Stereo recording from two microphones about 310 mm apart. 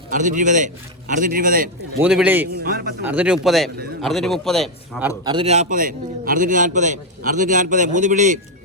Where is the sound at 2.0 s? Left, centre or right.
Centre.